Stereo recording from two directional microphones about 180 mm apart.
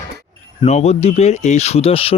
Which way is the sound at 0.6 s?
35° left (ahead or behind).